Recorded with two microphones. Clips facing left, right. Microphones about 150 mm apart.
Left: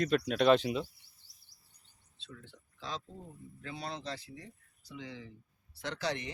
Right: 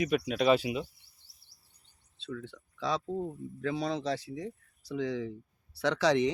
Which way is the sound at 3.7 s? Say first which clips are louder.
Right 9 dB; 90° right.